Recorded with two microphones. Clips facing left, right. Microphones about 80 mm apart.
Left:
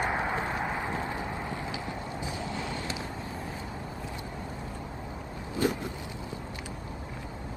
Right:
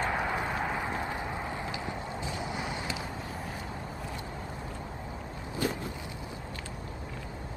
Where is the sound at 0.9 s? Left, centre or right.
Centre.